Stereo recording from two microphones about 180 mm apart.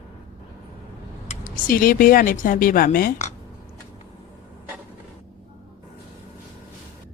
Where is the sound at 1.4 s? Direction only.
50° left (ahead or behind).